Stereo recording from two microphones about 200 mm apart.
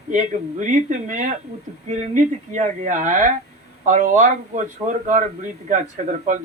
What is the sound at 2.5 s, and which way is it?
Speech, 35° right (ahead or behind).